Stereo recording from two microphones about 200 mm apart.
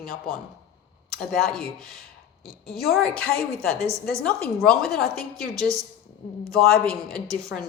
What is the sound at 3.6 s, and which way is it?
Speech, 15° right (ahead or behind).